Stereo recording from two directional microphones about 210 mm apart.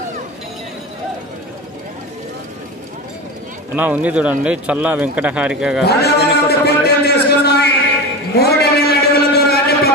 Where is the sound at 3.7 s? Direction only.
5° right (ahead or behind).